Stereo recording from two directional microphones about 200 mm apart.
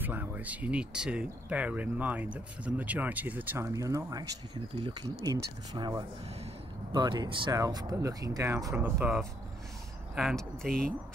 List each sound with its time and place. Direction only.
0.0 s speech: 10° right (ahead or behind)
10.1 s speech: centre (ahead or behind)